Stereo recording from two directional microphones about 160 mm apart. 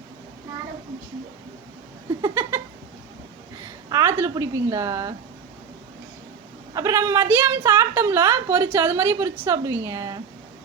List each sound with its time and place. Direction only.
3.8 s a woman's voice: 20° right (ahead or behind)
6.7 s a woman's voice: 20° right (ahead or behind)